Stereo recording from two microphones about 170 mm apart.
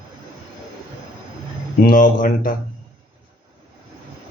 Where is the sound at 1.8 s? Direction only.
55° left (ahead or behind).